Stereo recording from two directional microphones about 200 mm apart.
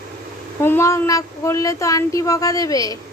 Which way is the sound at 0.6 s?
10° left (ahead or behind).